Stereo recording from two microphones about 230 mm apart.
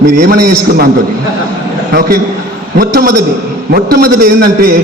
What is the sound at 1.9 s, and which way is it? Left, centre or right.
A man's voice, right.